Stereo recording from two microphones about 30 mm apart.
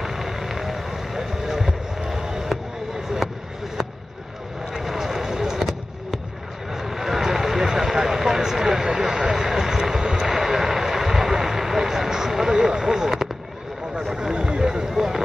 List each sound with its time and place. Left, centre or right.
0.0 s vehicle: centre
3.2 s a sound: centre
4.7 s fireworks: centre
6.7 s vehicle: centre
14.1 s a sound: right
14.9 s run: centre